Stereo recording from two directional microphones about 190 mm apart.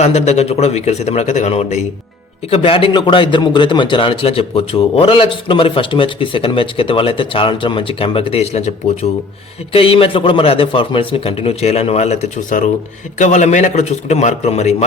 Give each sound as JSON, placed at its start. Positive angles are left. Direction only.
{"t": 0.0, "sound": "a man's voice", "side_deg": 35}